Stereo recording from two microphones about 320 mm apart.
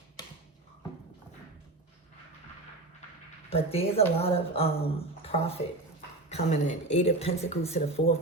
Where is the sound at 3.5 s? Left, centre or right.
Centre.